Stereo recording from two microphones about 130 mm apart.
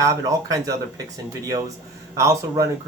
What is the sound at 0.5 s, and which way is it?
Speech, 25° right (ahead or behind).